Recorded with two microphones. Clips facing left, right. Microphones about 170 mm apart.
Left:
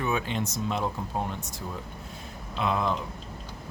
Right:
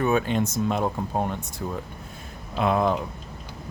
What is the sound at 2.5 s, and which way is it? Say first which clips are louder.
Speech: right 5 dB; 50° right (ahead or behind).